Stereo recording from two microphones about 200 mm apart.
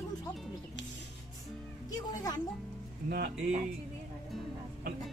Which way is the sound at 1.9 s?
20° left (ahead or behind).